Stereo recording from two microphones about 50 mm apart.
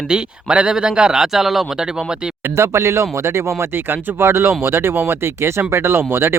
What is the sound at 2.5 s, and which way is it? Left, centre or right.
Speech, right.